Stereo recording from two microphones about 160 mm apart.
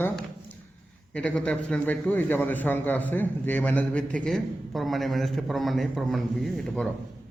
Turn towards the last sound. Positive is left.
turn(degrees=0)  # may be behind; listen again after turning